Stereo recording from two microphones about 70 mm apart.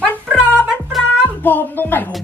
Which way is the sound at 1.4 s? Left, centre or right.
Left.